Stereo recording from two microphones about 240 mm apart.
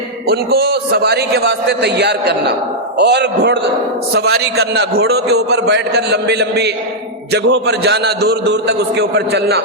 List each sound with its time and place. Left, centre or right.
0.3 s a man's voice: right